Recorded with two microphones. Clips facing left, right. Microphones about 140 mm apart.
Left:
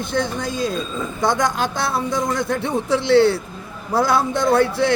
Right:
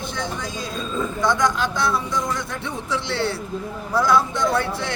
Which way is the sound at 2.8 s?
75° left (ahead or behind).